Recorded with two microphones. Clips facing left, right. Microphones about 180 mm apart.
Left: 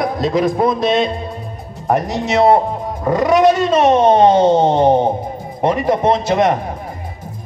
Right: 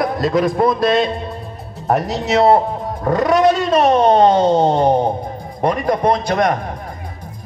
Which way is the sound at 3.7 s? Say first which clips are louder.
Left 1 dB; 20° left (ahead or behind).